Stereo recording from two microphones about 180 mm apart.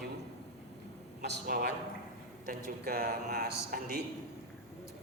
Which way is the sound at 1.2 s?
65° right (ahead or behind).